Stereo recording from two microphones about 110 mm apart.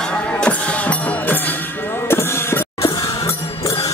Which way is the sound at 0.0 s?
10° left (ahead or behind).